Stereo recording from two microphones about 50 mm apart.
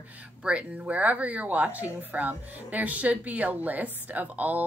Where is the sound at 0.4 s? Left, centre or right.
Right.